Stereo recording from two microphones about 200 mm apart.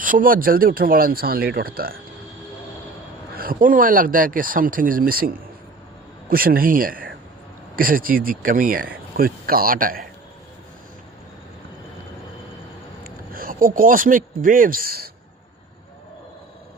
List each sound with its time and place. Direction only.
0.0 s speech: 45° right (ahead or behind)
3.3 s speech: 45° right (ahead or behind)
13.1 s speech: 45° right (ahead or behind)